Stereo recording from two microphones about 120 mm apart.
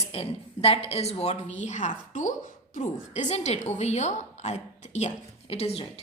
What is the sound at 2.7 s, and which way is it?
A woman's voice, 80° left.